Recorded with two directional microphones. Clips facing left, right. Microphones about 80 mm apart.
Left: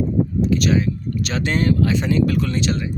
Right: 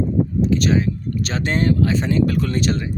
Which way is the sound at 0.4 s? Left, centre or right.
Right.